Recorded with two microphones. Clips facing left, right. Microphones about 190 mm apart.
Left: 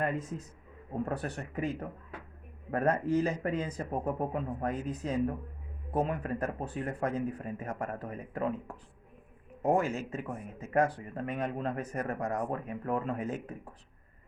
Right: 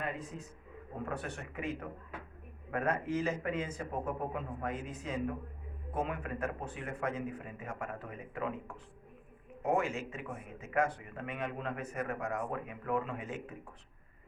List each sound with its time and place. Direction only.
0.0 s a man's voice: 45° left (ahead or behind)